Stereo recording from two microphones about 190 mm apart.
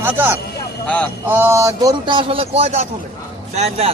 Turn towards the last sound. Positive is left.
turn(degrees=-35)  # may be behind; listen again after turning